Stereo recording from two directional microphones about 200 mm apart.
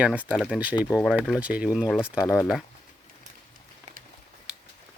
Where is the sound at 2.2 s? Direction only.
15° left (ahead or behind).